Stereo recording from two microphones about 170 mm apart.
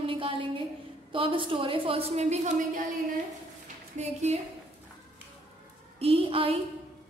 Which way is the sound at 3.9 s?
40° right (ahead or behind).